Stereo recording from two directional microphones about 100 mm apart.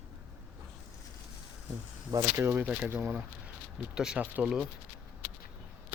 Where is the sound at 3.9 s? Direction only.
5° right (ahead or behind).